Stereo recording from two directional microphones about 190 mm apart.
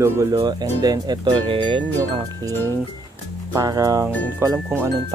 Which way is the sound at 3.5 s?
15° right (ahead or behind).